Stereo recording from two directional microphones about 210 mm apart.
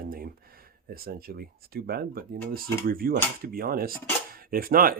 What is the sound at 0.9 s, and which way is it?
Cutlery, 45° right (ahead or behind).